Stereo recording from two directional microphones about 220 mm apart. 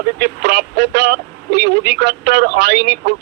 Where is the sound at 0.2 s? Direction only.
45° right (ahead or behind).